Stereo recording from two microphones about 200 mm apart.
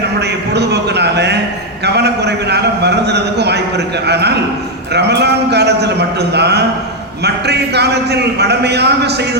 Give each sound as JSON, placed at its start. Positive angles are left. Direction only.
{"t": 0.5, "sound": "a man's voice", "side_deg": -55}